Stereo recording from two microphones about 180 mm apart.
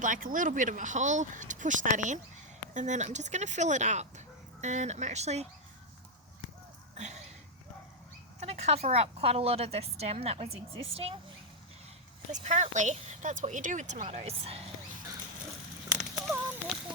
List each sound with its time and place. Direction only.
0.0 s a woman's voice: 50° right (ahead or behind)
6.9 s speech: 40° right (ahead or behind)
8.4 s a woman's voice: 35° right (ahead or behind)
12.3 s speech: 45° right (ahead or behind)